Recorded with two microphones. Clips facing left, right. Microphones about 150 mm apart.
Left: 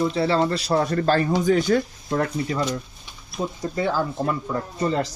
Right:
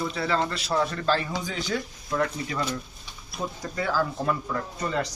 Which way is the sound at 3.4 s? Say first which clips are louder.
Left 6 dB; 20° left (ahead or behind).